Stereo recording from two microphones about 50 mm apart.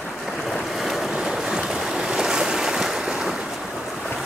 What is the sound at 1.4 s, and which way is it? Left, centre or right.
Waves, centre.